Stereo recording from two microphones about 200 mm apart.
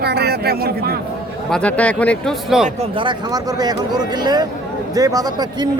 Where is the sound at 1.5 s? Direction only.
5° left (ahead or behind).